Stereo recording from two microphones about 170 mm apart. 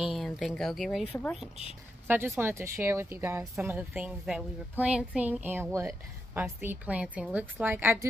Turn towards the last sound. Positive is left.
turn(degrees=-10)  # may be behind; listen again after turning